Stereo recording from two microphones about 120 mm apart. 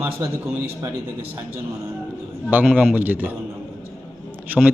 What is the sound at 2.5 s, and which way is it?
Speech, 10° right (ahead or behind).